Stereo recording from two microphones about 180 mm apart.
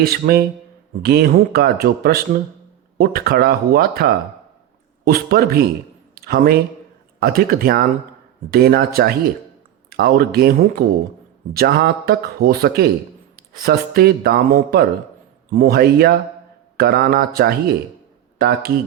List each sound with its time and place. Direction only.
0.0 s a man's voice: 60° right (ahead or behind)